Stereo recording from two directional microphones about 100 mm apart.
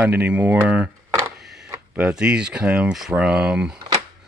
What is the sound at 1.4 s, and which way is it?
Mechanisms, 5° right (ahead or behind).